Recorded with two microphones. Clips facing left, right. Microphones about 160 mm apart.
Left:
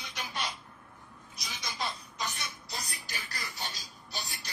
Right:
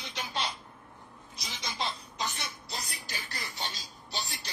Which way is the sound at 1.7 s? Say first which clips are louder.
Right 2 dB; 25° right (ahead or behind).